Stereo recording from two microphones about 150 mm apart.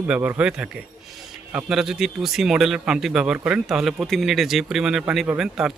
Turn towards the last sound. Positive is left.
turn(degrees=-5)  # may be behind; listen again after turning